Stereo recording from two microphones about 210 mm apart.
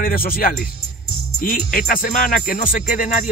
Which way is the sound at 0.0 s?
45° left (ahead or behind).